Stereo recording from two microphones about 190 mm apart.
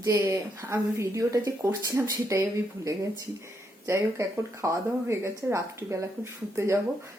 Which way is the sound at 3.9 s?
15° right (ahead or behind).